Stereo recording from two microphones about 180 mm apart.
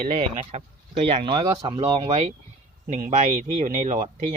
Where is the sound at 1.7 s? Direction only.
35° right (ahead or behind).